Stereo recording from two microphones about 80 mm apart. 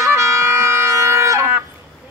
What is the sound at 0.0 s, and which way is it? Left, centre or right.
Music, right.